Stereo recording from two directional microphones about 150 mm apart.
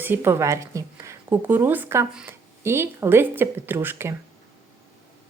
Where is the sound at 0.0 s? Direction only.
15° right (ahead or behind).